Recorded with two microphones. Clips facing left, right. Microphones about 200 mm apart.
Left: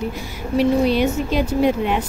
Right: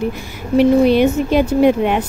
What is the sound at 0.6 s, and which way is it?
Speech, 55° right (ahead or behind).